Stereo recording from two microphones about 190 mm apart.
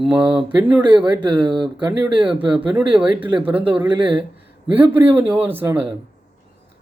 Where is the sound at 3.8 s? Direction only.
25° right (ahead or behind).